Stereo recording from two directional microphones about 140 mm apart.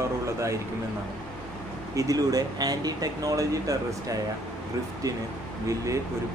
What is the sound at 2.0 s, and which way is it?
Speech, 25° right (ahead or behind).